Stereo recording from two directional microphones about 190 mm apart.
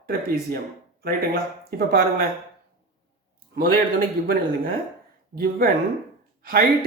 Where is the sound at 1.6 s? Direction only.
50° right (ahead or behind).